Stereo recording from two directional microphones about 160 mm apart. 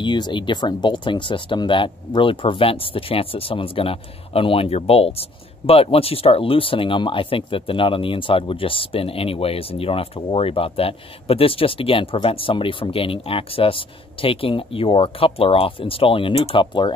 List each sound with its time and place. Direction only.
0.0 s speech: 30° left (ahead or behind)